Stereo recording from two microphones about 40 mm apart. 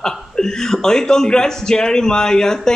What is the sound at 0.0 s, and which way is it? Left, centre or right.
Speech, centre.